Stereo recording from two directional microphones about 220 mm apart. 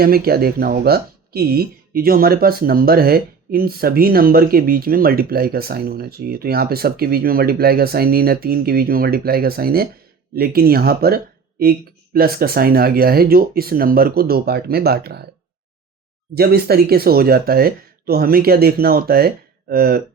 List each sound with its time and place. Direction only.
0.0 s speech: 45° right (ahead or behind)
16.3 s speech: 45° right (ahead or behind)